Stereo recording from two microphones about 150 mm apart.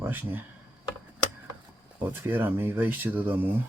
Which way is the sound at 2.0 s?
15° right (ahead or behind).